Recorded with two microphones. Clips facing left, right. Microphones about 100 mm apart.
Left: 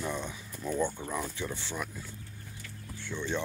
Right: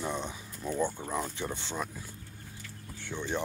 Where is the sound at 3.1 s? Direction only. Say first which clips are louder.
Even; 15° right (ahead or behind).